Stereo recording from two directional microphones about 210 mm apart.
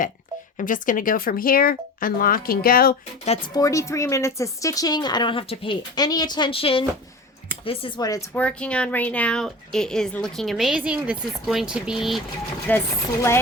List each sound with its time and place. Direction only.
0.6 s speech: 40° left (ahead or behind)
3.2 s speech: 30° left (ahead or behind)
3.6 s speech: 15° left (ahead or behind)
8.4 s a woman's voice: 5° left (ahead or behind)